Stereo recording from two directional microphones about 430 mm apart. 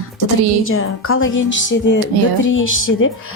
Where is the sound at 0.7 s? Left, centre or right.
Left.